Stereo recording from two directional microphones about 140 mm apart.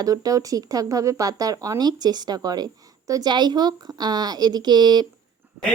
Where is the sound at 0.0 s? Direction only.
25° right (ahead or behind).